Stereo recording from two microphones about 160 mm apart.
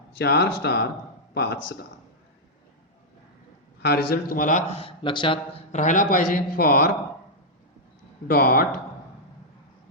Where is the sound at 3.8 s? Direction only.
80° left; by 5.6 s 30° left (ahead or behind).